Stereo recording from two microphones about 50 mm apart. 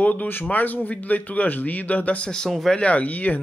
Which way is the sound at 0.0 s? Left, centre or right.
Left.